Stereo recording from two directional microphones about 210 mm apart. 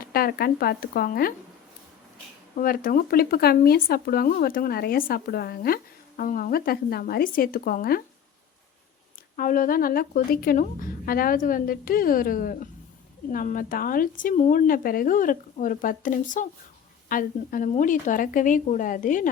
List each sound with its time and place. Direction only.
0.0 s speech: 45° left (ahead or behind)
2.6 s speech: 40° left (ahead or behind)
9.3 s a woman's voice: 40° left (ahead or behind)